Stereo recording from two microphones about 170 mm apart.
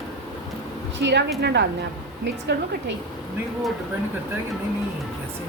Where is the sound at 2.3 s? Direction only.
90° right.